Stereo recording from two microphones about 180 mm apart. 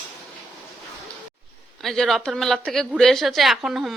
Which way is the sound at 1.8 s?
5° left (ahead or behind).